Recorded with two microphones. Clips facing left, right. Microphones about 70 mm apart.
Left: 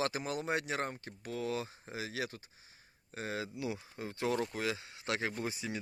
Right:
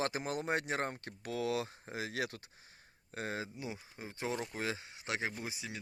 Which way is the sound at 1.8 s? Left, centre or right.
Right.